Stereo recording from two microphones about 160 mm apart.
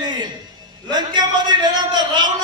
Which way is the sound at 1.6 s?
30° right (ahead or behind).